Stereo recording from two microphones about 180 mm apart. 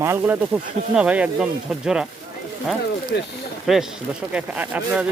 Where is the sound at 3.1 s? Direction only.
65° left (ahead or behind).